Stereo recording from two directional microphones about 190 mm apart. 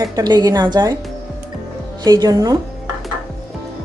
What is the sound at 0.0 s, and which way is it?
Speech, 20° right (ahead or behind).